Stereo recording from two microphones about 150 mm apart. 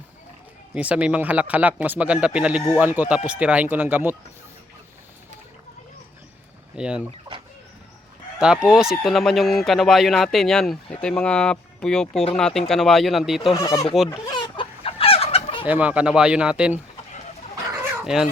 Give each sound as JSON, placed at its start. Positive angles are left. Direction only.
{"t": 0.7, "sound": "speech", "side_deg": -10}
{"t": 6.7, "sound": "speech", "side_deg": -5}
{"t": 8.4, "sound": "speech", "side_deg": -5}
{"t": 13.5, "sound": "speech", "side_deg": 25}
{"t": 14.1, "sound": "chicken", "side_deg": 30}
{"t": 15.6, "sound": "speech", "side_deg": -10}
{"t": 18.0, "sound": "fowl", "side_deg": -5}